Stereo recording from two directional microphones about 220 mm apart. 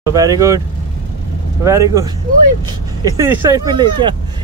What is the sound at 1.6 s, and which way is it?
Speech, 15° right (ahead or behind).